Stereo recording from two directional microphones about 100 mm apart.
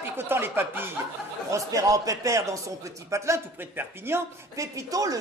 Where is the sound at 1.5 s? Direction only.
35° right (ahead or behind).